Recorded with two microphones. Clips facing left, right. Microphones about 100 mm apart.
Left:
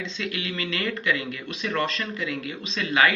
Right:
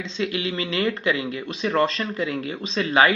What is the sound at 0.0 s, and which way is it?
Speech, 30° right (ahead or behind).